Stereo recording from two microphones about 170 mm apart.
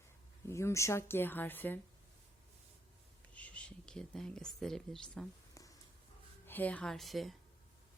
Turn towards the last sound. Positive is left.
turn(degrees=0)  # may be behind; listen again after turning